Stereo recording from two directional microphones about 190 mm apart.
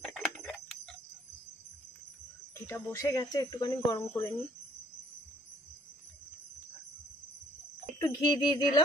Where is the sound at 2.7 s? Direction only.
15° left (ahead or behind).